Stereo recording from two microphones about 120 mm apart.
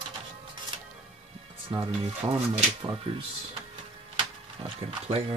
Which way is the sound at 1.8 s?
55° right (ahead or behind).